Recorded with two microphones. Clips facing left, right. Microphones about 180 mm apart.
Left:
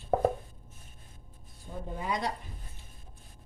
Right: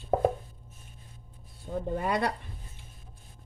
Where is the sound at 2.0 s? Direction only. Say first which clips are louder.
Right 3 dB; 65° right (ahead or behind).